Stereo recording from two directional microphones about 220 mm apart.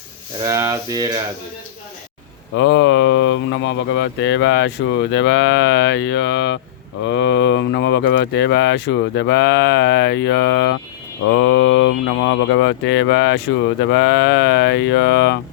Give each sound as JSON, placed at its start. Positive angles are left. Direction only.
{"t": 0.4, "sound": "speech", "side_deg": -15}
{"t": 2.6, "sound": "speech", "side_deg": 55}